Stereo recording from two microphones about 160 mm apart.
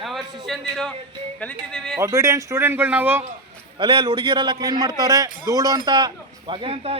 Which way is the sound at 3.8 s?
30° right (ahead or behind).